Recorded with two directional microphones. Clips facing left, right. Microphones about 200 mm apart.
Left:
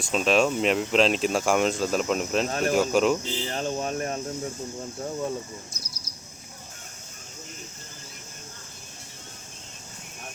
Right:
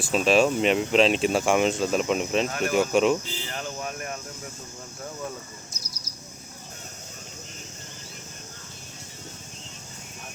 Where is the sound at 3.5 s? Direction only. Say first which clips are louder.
Left 5 dB; 30° left (ahead or behind).